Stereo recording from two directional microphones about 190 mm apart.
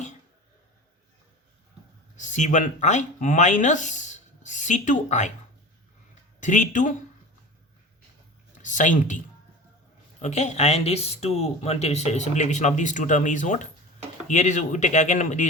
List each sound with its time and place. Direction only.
2.1 s speech: 40° left (ahead or behind)
6.4 s speech: 40° left (ahead or behind)
8.6 s speech: 40° left (ahead or behind)